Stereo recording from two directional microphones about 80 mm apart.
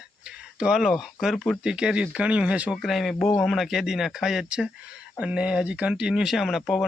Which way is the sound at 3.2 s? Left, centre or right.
Left.